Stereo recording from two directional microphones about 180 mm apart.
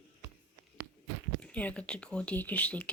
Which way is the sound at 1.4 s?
10° left (ahead or behind).